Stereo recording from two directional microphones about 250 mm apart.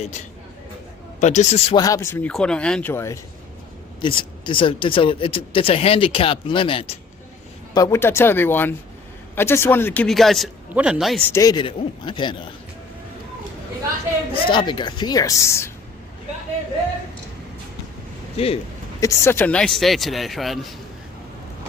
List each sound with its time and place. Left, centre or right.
1.2 s speech: left
1.7 s a man's voice: centre
14.4 s a man's voice: centre
18.3 s speech: left
18.9 s speech: centre